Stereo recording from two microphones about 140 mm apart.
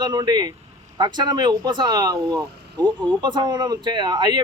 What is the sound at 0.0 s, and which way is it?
Speech, 30° right (ahead or behind).